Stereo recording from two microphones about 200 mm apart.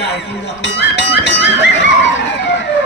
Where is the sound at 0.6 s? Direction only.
60° left (ahead or behind).